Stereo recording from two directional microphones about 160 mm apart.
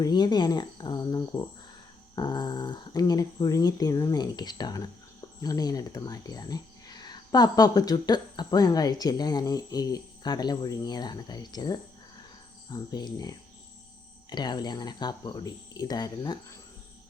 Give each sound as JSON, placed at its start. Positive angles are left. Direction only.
{"t": 0.0, "sound": "speech", "side_deg": 25}